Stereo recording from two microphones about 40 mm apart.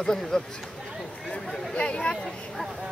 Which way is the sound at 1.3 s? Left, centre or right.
Left.